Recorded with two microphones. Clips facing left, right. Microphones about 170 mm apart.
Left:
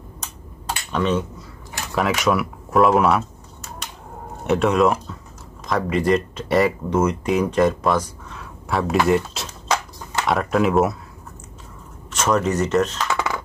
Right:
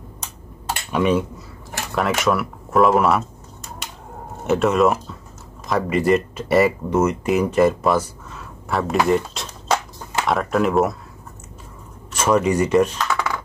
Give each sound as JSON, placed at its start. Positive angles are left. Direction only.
{"t": 0.7, "sound": "computer keyboard", "side_deg": -10}
{"t": 2.0, "sound": "speech", "side_deg": 0}
{"t": 4.5, "sound": "speech", "side_deg": 0}
{"t": 12.1, "sound": "speech", "side_deg": -10}